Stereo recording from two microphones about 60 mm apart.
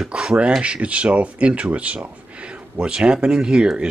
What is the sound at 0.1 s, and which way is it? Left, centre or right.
Speech, centre.